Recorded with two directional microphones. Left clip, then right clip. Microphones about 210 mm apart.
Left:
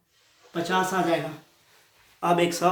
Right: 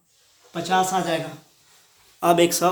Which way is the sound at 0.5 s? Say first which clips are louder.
Right 4 dB; 35° right (ahead or behind).